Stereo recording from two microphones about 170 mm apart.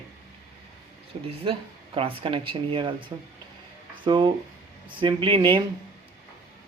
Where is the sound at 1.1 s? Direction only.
35° right (ahead or behind).